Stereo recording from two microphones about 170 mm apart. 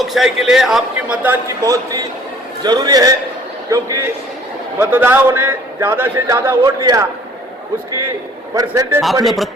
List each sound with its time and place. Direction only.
0.0 s a man's voice: centre (ahead or behind); by 7.0 s 25° right (ahead or behind)
8.5 s a man's voice: 20° right (ahead or behind)
9.2 s a man's voice: centre (ahead or behind)